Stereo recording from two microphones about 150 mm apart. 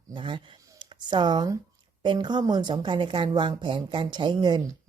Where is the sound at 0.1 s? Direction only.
30° right (ahead or behind).